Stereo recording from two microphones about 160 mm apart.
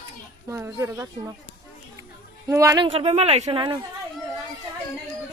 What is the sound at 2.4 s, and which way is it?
Speech, 20° right (ahead or behind).